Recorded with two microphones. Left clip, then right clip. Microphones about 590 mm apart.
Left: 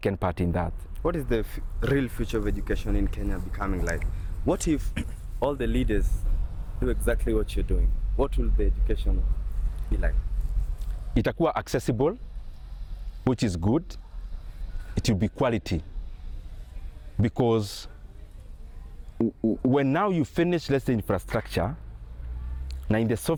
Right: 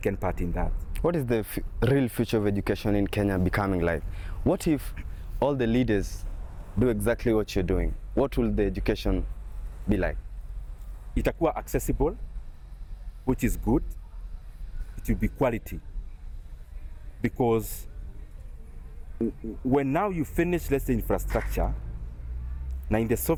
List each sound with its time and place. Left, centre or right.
0.0 s speech: left
0.9 s speech: right
4.4 s speech: right
5.4 s speech: right
6.8 s speech: right
8.2 s speech: right
11.1 s speech: left
13.3 s speech: left
14.9 s speech: left
17.2 s speech: left
19.7 s speech: left
22.9 s speech: left